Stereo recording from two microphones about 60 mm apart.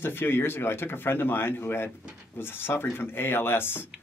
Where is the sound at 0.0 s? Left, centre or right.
Left.